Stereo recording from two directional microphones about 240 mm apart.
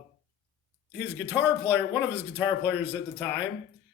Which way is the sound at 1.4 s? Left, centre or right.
Centre.